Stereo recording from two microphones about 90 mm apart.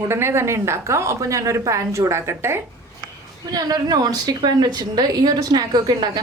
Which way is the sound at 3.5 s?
45° right (ahead or behind).